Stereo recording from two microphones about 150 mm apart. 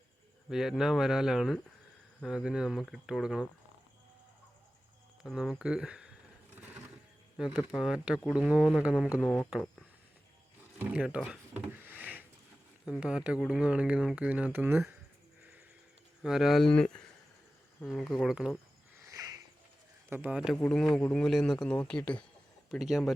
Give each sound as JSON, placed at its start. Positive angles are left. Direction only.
{"t": 0.5, "sound": "speech", "side_deg": -5}
{"t": 5.2, "sound": "speech", "side_deg": -5}
{"t": 7.4, "sound": "speech", "side_deg": -5}
{"t": 9.2, "sound": "speech", "side_deg": 10}
{"t": 10.8, "sound": "music", "side_deg": -5}
{"t": 12.8, "sound": "speech", "side_deg": -5}
{"t": 16.2, "sound": "speech", "side_deg": -5}
{"t": 19.0, "sound": "a sound", "side_deg": -25}
{"t": 20.1, "sound": "speech", "side_deg": -15}
{"t": 20.7, "sound": "speech", "side_deg": 5}